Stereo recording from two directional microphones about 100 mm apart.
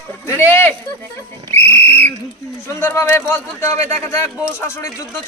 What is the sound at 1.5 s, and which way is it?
Whistle, 20° left (ahead or behind).